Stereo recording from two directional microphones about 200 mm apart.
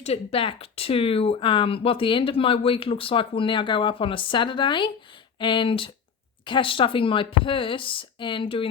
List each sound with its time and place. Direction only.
0.0 s speech: 30° left (ahead or behind)